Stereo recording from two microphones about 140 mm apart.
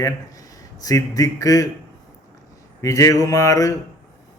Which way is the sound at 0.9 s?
25° left (ahead or behind).